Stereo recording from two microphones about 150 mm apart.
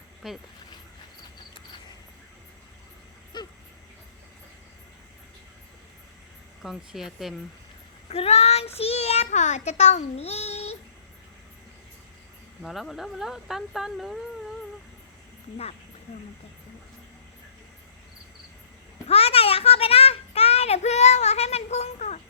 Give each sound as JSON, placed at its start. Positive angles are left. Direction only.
{"t": 0.2, "sound": "speech", "side_deg": 0}
{"t": 3.3, "sound": "vehicle", "side_deg": 30}
{"t": 6.6, "sound": "speech", "side_deg": 0}
{"t": 8.1, "sound": "a child's voice", "side_deg": 45}
{"t": 12.6, "sound": "speech", "side_deg": 0}
{"t": 19.0, "sound": "a sound", "side_deg": 40}